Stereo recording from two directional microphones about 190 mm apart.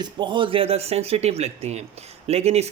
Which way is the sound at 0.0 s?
25° right (ahead or behind).